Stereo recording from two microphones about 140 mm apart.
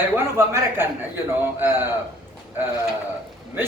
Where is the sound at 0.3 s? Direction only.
20° right (ahead or behind).